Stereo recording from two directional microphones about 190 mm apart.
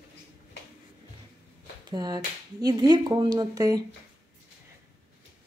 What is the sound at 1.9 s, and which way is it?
Speech, 20° right (ahead or behind).